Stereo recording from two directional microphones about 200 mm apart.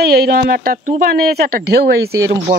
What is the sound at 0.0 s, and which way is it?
Speech, 50° right (ahead or behind).